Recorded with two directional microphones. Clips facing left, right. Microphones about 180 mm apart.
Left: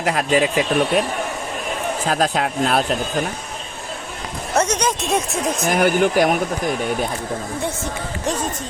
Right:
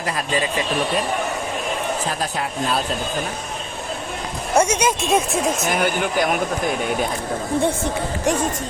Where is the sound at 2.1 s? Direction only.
85° left; by 2.8 s 65° left (ahead or behind).